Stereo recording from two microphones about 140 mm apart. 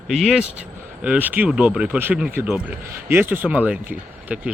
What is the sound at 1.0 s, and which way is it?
Speech, 10° right (ahead or behind).